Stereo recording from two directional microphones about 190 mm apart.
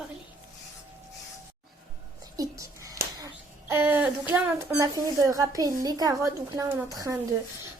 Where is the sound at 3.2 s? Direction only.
15° right (ahead or behind).